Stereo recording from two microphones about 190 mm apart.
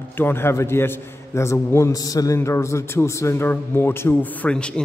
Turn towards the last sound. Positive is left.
turn(degrees=5)  # may be behind; listen again after turning